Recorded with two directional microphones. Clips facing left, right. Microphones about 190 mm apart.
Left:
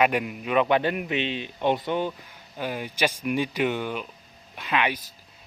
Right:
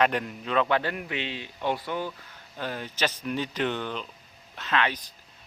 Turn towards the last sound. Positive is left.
turn(degrees=10)  # may be behind; listen again after turning